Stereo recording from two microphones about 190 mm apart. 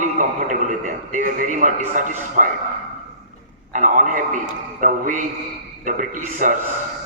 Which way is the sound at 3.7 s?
40° right (ahead or behind).